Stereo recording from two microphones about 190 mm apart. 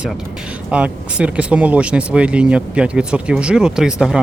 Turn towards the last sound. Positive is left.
turn(degrees=-5)  # may be behind; listen again after turning